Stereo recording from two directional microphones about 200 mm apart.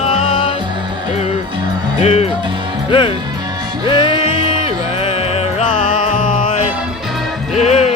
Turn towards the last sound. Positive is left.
turn(degrees=35)  # may be behind; listen again after turning